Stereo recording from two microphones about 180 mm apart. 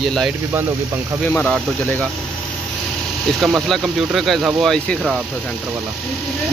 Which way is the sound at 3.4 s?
Centre (ahead or behind).